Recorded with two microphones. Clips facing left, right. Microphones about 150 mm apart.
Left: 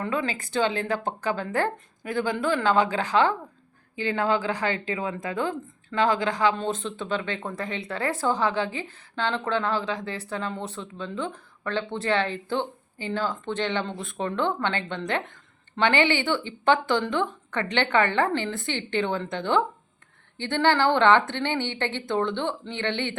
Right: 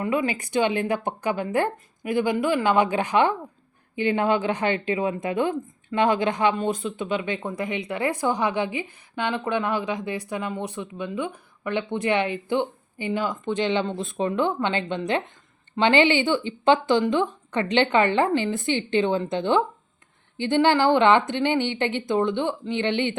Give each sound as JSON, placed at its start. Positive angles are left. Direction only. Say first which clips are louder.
{"t": 0.0, "sound": "speech", "louder": "right 4 dB", "side_deg": -15}